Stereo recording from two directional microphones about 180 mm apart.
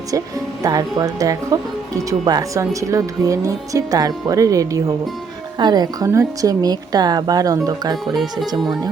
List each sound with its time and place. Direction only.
0.6 s speech: 20° right (ahead or behind)